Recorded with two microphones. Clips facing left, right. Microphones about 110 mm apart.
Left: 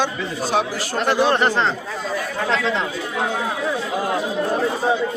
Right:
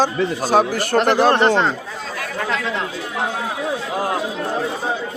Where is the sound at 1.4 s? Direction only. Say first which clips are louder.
Right 3 dB; 20° right (ahead or behind).